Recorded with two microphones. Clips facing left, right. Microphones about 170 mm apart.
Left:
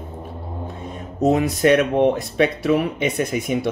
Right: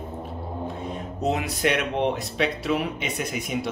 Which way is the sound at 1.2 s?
45° left (ahead or behind).